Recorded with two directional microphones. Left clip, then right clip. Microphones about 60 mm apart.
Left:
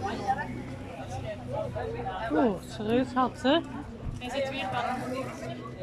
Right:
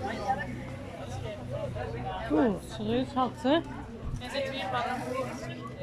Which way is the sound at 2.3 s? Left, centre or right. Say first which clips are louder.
Even; centre.